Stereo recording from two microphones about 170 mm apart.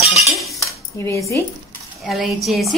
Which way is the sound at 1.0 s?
15° left (ahead or behind).